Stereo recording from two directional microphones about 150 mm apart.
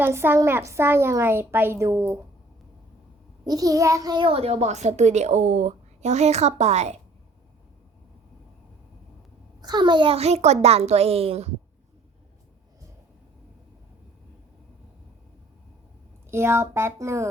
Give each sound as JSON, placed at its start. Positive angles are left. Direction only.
{"t": 0.0, "sound": "a woman's voice", "side_deg": -15}
{"t": 3.4, "sound": "a child's voice", "side_deg": -25}
{"t": 9.6, "sound": "a child's voice", "side_deg": -30}
{"t": 16.3, "sound": "a woman's voice", "side_deg": -15}